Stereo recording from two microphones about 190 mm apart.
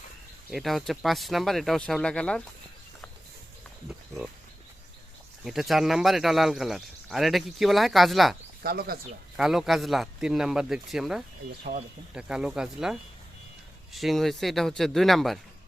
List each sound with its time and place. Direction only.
0.5 s speech: centre (ahead or behind)
3.8 s a sound: 5° right (ahead or behind)
5.5 s speech: centre (ahead or behind)
8.6 s speech: 55° right (ahead or behind)
9.4 s speech: centre (ahead or behind)